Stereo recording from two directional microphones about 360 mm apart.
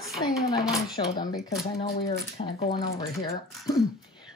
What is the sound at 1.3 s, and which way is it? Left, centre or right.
A woman's voice, left.